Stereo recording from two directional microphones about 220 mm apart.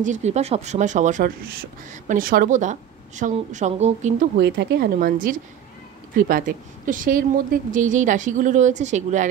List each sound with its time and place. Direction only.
0.0 s a woman's voice: 30° right (ahead or behind)
4.4 s a woman's voice: 50° right (ahead or behind); by 9.3 s 35° right (ahead or behind)